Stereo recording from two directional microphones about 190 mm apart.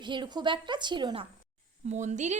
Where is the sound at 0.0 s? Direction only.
25° right (ahead or behind).